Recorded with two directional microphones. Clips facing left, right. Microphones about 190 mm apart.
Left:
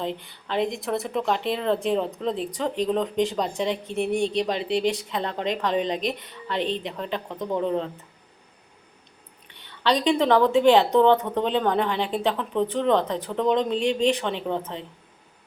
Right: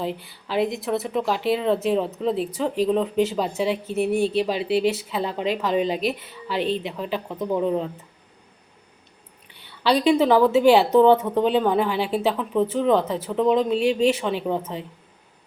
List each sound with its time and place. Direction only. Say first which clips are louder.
0.0 s speech: right 2 dB; 5° right (ahead or behind)
9.6 s speech: right 3 dB; 10° right (ahead or behind)